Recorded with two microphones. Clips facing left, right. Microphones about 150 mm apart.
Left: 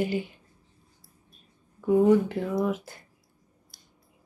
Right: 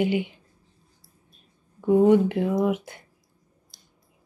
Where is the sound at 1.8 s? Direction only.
25° right (ahead or behind).